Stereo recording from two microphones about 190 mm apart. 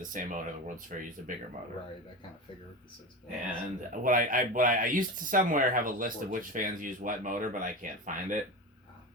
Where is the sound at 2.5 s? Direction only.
30° left (ahead or behind).